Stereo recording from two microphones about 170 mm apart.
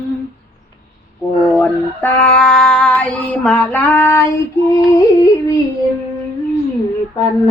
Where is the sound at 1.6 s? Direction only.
10° left (ahead or behind).